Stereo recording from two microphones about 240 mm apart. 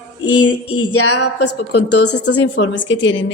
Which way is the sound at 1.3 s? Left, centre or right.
Left.